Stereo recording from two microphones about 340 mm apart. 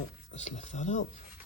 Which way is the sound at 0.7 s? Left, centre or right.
Centre.